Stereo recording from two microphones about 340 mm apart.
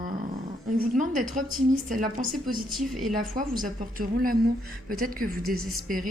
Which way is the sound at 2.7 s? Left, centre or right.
Centre.